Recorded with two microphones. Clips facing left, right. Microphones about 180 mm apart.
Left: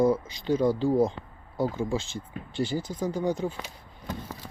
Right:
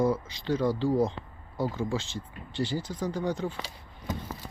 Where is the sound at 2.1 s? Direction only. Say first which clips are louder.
Left 2 dB; 50° left (ahead or behind).